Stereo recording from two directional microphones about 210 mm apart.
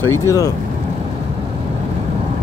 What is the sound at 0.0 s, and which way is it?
Speech, 15° left (ahead or behind).